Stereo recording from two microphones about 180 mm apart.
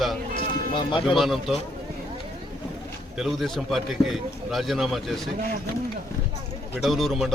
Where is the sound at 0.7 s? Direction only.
30° left (ahead or behind).